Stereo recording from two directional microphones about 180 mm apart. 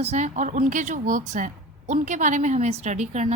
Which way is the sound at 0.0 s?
40° right (ahead or behind).